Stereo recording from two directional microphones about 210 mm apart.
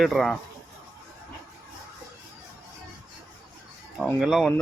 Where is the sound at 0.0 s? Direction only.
Centre (ahead or behind).